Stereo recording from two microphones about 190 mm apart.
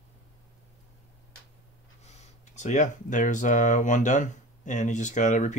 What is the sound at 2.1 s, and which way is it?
Speech, 40° left (ahead or behind).